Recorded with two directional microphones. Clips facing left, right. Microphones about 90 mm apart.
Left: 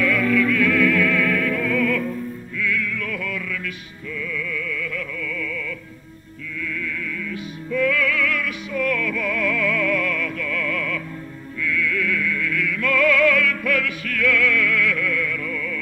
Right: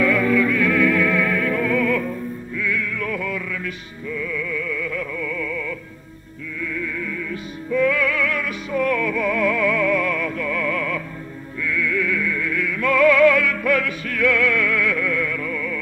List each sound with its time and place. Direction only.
0.0 s music: 25° right (ahead or behind)
11.6 s opera: 30° right (ahead or behind)